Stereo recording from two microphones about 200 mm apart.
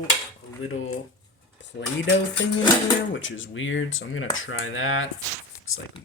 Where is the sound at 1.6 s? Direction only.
65° left (ahead or behind).